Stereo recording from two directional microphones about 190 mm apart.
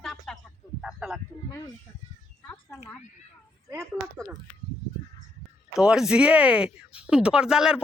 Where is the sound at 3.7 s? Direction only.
10° right (ahead or behind).